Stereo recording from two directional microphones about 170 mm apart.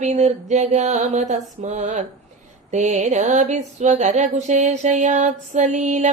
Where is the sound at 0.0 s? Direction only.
40° right (ahead or behind).